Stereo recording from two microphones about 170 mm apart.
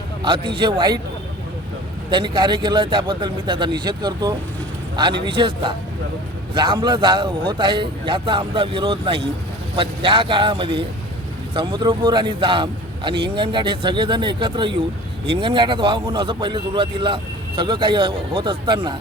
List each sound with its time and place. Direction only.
0.2 s a man's voice: 30° right (ahead or behind)
2.0 s a man's voice: 30° right (ahead or behind)